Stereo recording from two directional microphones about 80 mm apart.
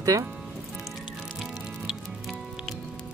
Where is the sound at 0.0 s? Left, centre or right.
Right.